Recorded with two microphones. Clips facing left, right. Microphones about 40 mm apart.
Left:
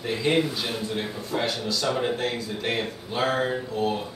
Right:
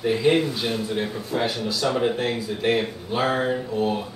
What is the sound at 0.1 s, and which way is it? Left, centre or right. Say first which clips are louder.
Speech: right 2 dB; centre.